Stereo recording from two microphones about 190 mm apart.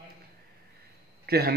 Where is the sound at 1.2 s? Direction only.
55° right (ahead or behind).